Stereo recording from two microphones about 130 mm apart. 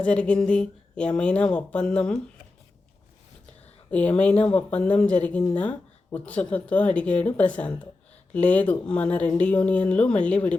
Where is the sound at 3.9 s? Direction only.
10° left (ahead or behind).